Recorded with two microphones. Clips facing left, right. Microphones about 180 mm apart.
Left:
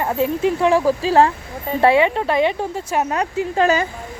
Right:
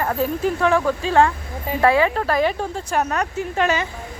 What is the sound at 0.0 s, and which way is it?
Speech, 25° left (ahead or behind).